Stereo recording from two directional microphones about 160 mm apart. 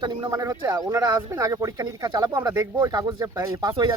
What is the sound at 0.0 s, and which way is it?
Speech, 25° right (ahead or behind).